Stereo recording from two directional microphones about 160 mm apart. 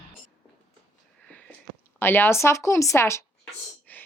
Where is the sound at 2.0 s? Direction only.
15° left (ahead or behind).